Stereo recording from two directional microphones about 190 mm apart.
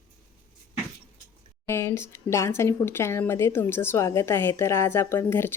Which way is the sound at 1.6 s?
15° left (ahead or behind).